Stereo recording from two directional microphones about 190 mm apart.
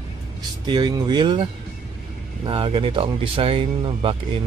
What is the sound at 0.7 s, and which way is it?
Speech, 25° right (ahead or behind).